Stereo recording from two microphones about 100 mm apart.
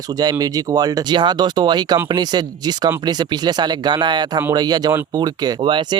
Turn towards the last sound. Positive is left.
turn(degrees=-55)  # may be behind; listen again after turning